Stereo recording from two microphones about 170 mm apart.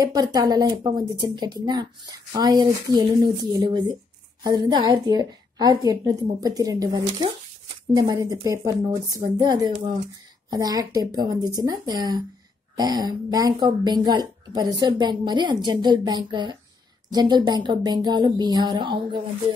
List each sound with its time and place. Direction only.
0.0 s speech: 20° right (ahead or behind)